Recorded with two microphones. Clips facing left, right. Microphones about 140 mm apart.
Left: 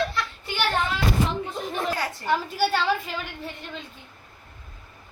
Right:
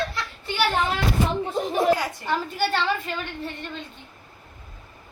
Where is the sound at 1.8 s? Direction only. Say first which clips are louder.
Right 8 dB; 15° right (ahead or behind).